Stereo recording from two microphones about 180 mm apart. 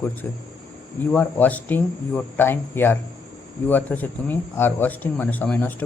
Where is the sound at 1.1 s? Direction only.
10° left (ahead or behind).